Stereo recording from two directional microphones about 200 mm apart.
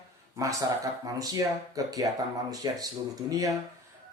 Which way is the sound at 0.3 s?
15° right (ahead or behind).